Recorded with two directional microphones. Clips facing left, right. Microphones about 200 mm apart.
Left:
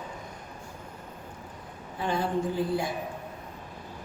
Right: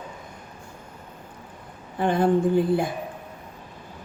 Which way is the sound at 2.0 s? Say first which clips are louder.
Right 8 dB; 55° right (ahead or behind).